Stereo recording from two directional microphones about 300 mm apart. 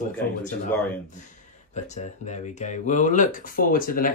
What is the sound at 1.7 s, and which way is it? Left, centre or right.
Speech, left.